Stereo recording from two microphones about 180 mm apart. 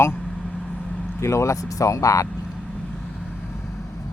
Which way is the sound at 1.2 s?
15° left (ahead or behind).